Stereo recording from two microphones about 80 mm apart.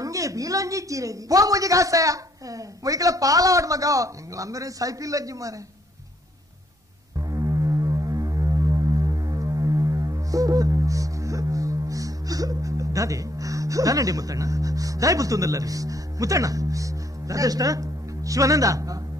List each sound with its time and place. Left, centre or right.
0.0 s a man's voice: right
7.2 s music: right